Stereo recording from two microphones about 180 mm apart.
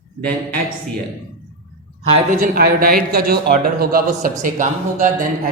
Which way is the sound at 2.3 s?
55° right (ahead or behind).